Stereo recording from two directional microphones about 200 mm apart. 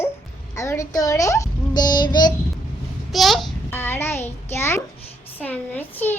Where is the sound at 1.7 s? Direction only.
20° left (ahead or behind).